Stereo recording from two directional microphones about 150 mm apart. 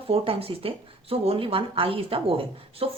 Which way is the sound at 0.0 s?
40° right (ahead or behind).